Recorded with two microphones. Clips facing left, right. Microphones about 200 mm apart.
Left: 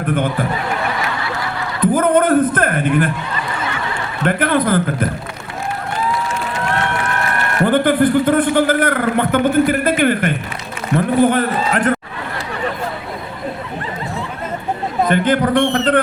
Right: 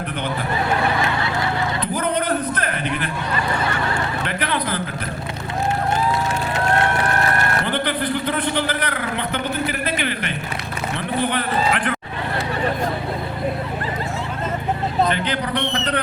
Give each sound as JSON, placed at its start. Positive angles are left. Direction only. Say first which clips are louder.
{"t": 1.8, "sound": "a sound", "louder": "left 14 dB", "side_deg": 50}
{"t": 4.3, "sound": "a man's voice", "louder": "left 14 dB", "side_deg": 50}
{"t": 7.6, "sound": "a man's voice", "louder": "left 10 dB", "side_deg": 50}
{"t": 15.0, "sound": "a man's voice", "louder": "left 10 dB", "side_deg": 50}